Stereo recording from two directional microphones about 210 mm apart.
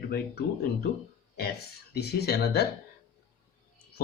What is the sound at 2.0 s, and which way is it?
Speech, 50° left (ahead or behind).